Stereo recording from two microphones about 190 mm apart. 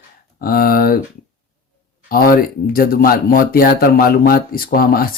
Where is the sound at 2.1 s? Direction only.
50° left (ahead or behind).